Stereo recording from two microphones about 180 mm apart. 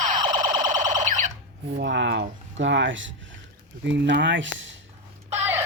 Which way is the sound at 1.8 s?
90° right.